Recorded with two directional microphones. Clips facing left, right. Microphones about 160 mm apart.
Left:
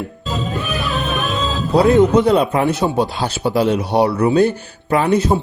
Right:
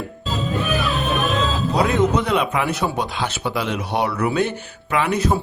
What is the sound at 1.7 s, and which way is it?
A man's voice, 30° left (ahead or behind).